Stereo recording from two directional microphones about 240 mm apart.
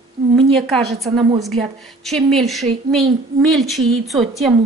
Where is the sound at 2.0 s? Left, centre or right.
Centre.